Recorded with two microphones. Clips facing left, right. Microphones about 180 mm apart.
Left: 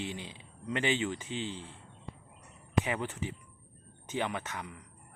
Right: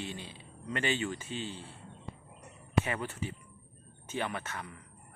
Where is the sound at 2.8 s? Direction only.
15° left (ahead or behind).